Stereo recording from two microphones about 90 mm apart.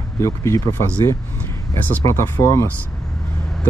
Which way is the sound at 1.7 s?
20° left (ahead or behind).